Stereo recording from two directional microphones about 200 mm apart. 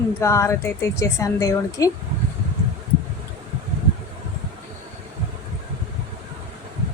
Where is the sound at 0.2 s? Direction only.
15° left (ahead or behind).